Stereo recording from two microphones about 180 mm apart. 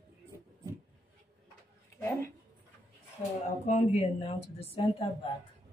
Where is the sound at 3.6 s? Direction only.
35° left (ahead or behind).